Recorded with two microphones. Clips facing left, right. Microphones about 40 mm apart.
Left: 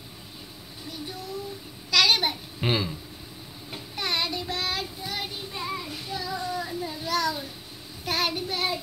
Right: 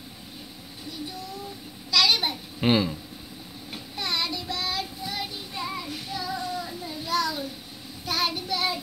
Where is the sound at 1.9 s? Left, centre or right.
Left.